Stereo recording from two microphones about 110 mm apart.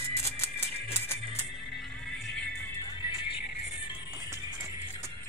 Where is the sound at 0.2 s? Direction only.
25° left (ahead or behind).